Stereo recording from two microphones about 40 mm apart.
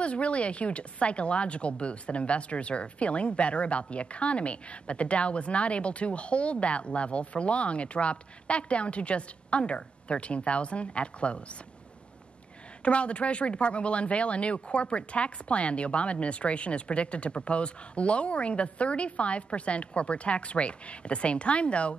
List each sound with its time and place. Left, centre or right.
0.0 s speech: left
12.8 s speech: left